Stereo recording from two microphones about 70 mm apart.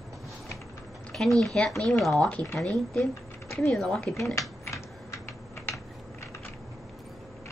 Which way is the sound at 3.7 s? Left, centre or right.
Centre.